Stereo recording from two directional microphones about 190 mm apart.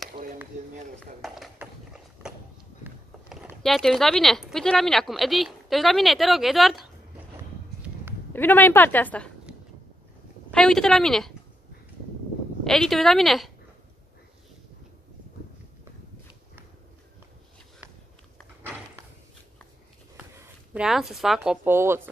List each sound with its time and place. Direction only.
1.2 s a sound: centre (ahead or behind)
3.4 s speech: centre (ahead or behind)
8.3 s a woman's voice: 10° left (ahead or behind)
10.5 s speech: 5° left (ahead or behind)
12.6 s speech: centre (ahead or behind)
20.3 s speech: 5° right (ahead or behind)